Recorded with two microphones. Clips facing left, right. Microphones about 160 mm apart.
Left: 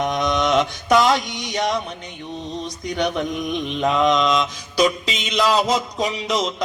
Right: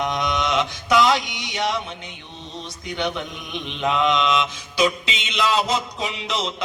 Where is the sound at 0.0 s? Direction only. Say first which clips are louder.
Left 3 dB; 45° left (ahead or behind).